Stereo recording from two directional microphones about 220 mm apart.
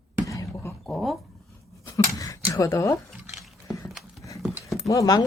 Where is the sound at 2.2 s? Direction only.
15° left (ahead or behind).